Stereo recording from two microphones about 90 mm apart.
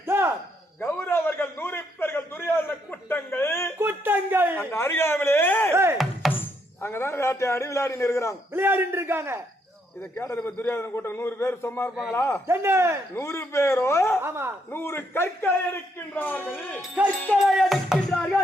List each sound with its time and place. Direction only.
0.0 s a sound: 25° right (ahead or behind)
0.9 s a sound: 25° left (ahead or behind)
3.8 s a sound: 20° right (ahead or behind)
4.7 s a sound: 25° left (ahead or behind)
5.7 s music: 30° right (ahead or behind)
6.3 s speech: 25° left (ahead or behind)
8.5 s a man's voice: 25° right (ahead or behind)
10.2 s a man's voice: 20° left (ahead or behind)
12.5 s a man's voice: 30° right (ahead or behind)
13.1 s a man's voice: 30° left (ahead or behind)
14.2 s a man's voice: 30° right (ahead or behind)
14.7 s a man's voice: 25° left (ahead or behind)
17.4 s music: centre (ahead or behind)